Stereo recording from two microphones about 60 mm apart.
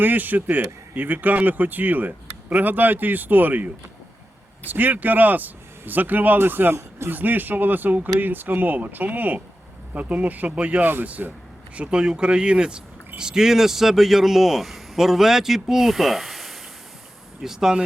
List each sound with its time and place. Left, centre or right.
0.0 s speech: right
4.7 s speech: right
11.7 s speech: centre